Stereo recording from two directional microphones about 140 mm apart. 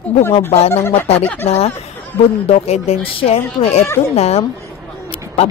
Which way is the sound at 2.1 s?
15° left (ahead or behind).